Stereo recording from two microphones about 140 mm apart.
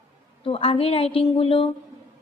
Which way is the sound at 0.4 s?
40° left (ahead or behind).